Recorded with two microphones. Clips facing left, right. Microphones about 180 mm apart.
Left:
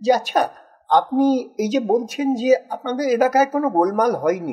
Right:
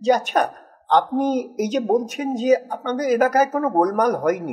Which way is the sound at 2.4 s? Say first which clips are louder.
Even; 30° left (ahead or behind).